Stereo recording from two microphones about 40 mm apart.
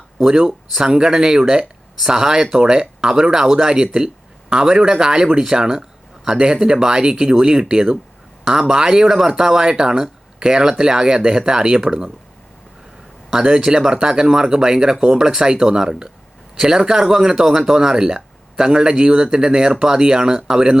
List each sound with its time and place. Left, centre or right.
0.2 s speech: centre
13.3 s speech: centre